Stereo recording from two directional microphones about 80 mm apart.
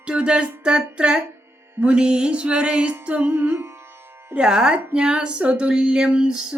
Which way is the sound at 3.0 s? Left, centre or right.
Centre.